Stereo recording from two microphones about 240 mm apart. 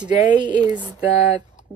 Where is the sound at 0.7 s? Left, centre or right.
Centre.